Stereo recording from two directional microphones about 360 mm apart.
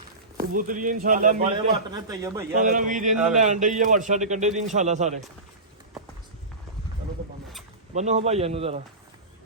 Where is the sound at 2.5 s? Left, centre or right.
Right.